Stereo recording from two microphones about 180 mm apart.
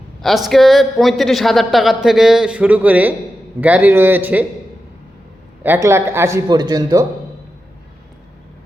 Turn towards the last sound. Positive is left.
turn(degrees=-20)  # may be behind; listen again after turning